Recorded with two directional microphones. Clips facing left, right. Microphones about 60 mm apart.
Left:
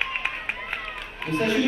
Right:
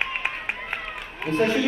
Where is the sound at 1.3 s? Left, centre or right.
Right.